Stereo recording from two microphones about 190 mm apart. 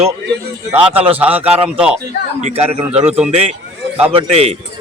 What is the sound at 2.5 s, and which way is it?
Speech, 35° right (ahead or behind).